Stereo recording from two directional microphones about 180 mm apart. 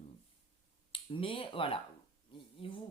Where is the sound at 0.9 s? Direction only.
30° left (ahead or behind).